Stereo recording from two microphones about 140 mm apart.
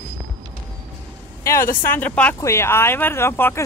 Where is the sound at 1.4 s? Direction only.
20° left (ahead or behind).